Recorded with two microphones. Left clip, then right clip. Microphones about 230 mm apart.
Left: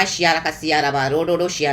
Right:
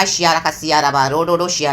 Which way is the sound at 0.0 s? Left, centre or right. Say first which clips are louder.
Right 3 dB; centre.